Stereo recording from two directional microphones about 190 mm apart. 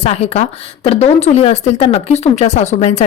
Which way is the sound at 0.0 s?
35° left (ahead or behind).